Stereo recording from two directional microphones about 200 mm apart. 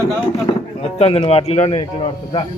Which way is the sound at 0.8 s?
30° left (ahead or behind).